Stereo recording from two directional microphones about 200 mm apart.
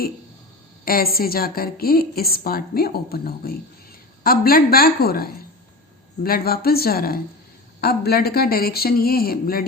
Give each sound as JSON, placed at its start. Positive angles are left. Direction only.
{"t": 0.9, "sound": "a woman's voice", "side_deg": 45}